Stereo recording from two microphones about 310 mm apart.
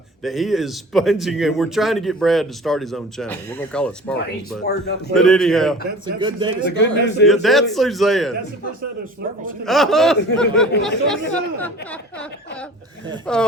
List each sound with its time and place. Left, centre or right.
0.2 s speech: centre
6.1 s speech: centre
6.7 s a man's voice: left
7.3 s speech: centre
9.6 s speech: centre
13.3 s speech: centre